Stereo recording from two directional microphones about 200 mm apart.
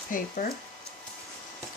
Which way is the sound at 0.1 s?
40° left (ahead or behind).